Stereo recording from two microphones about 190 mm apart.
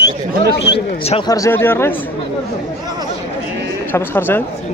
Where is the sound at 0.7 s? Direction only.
30° left (ahead or behind).